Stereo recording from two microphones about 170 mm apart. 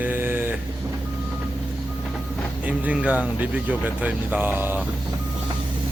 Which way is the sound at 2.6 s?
10° right (ahead or behind).